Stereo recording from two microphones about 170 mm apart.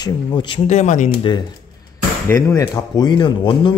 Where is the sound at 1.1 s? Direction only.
30° left (ahead or behind).